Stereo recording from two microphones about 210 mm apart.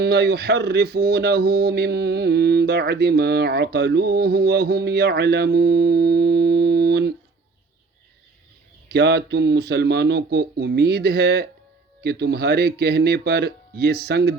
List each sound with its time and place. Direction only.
0.0 s speech: 50° right (ahead or behind)
8.9 s speech: 50° right (ahead or behind)